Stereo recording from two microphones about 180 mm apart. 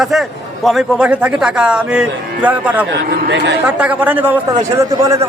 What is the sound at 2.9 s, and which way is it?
Speech, 75° right (ahead or behind).